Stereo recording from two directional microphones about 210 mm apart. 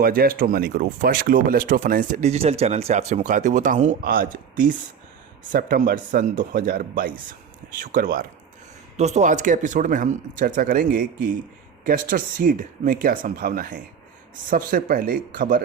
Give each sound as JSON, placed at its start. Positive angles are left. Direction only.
{"t": 0.0, "sound": "speech", "side_deg": -45}